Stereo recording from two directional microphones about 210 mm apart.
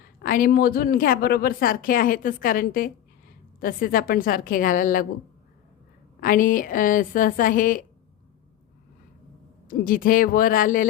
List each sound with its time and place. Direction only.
0.2 s a woman's voice: 45° left (ahead or behind)
6.1 s a woman's voice: 40° left (ahead or behind)
9.6 s a woman's voice: 40° left (ahead or behind)